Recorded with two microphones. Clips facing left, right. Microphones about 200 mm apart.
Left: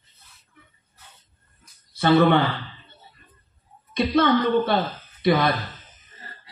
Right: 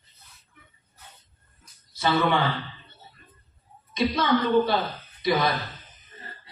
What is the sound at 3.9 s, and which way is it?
A woman's voice, 60° left (ahead or behind).